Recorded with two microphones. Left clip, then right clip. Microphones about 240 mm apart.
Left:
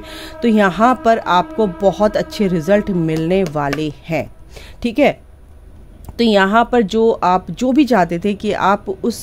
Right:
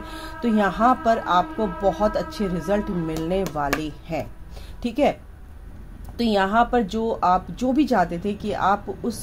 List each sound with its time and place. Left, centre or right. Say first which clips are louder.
0.0 s speech: left 8 dB; left
6.1 s speech: left 7 dB; left